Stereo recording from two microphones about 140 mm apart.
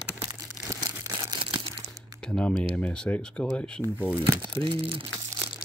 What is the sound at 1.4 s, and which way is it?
Crumpling, 40° right (ahead or behind).